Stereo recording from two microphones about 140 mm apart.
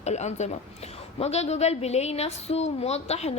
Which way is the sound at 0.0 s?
55° left (ahead or behind).